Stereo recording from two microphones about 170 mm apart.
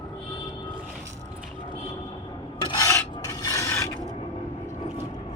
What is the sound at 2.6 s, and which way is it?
Filing, 20° left (ahead or behind).